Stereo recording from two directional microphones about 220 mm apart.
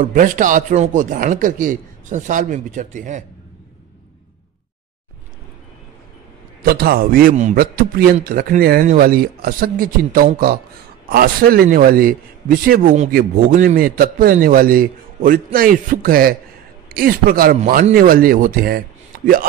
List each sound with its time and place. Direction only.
0.0 s a man's voice: 40° right (ahead or behind)
6.6 s a man's voice: 45° right (ahead or behind)